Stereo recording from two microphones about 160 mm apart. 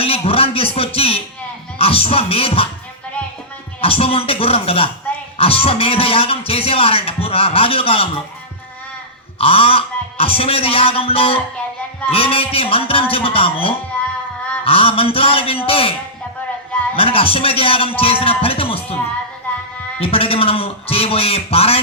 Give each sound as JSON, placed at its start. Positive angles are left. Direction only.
{"t": 0.0, "sound": "a sound", "side_deg": 35}
{"t": 1.8, "sound": "speech", "side_deg": 35}
{"t": 3.8, "sound": "speech", "side_deg": 35}
{"t": 9.4, "sound": "speech", "side_deg": 35}
{"t": 20.0, "sound": "speech", "side_deg": 35}